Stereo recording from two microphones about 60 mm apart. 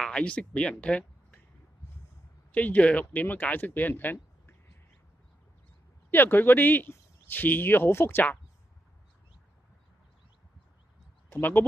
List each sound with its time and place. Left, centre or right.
0.0 s speech: centre
2.5 s speech: left
6.0 s speech: left
11.3 s speech: left